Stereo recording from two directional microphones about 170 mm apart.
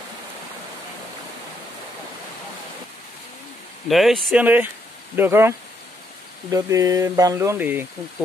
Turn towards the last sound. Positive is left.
turn(degrees=-10)  # may be behind; listen again after turning